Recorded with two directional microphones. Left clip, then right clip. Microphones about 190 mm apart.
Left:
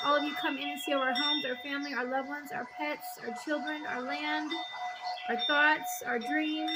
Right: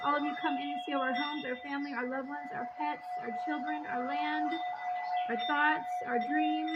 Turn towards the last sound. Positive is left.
turn(degrees=10)  # may be behind; listen again after turning